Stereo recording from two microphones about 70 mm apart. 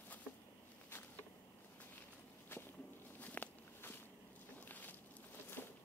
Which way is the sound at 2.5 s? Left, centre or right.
Left.